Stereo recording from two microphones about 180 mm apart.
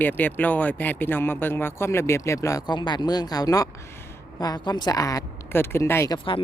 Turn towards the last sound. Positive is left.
turn(degrees=15)  # may be behind; listen again after turning